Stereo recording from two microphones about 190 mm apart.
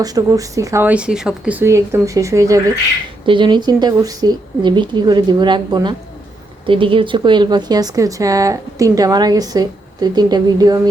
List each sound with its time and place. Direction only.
0.0 s speech: 20° right (ahead or behind)